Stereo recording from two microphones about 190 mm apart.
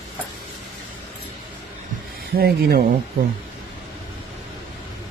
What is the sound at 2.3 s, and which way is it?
Speech, 55° right (ahead or behind).